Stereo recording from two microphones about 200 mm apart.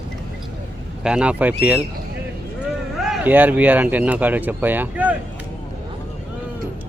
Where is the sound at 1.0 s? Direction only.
5° right (ahead or behind).